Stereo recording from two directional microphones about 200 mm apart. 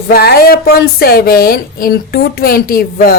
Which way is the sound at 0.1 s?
50° left (ahead or behind).